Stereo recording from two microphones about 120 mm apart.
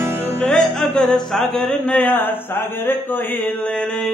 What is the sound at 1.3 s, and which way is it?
A man's voice, centre (ahead or behind).